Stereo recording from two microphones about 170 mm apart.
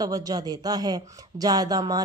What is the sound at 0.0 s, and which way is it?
Speech, 20° right (ahead or behind).